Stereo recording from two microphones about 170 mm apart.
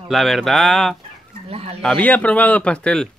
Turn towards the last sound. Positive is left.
turn(degrees=5)  # may be behind; listen again after turning